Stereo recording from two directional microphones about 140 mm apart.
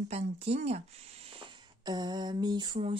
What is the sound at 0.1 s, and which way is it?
Speech, 50° right (ahead or behind).